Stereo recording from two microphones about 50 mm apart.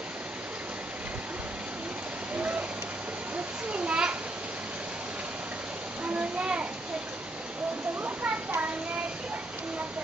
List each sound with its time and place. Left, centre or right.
2.3 s rain: right
3.7 s children playing: right
6.0 s children playing: right
8.0 s a child's voice: right